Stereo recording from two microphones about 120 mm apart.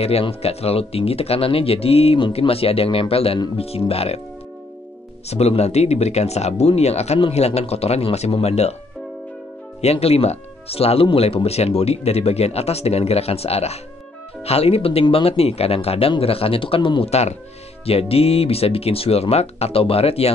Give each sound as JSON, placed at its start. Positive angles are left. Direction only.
{"t": 0.0, "sound": "speech", "side_deg": 55}
{"t": 5.3, "sound": "speech", "side_deg": 60}
{"t": 9.8, "sound": "speech", "side_deg": 60}
{"t": 17.1, "sound": "speech", "side_deg": 65}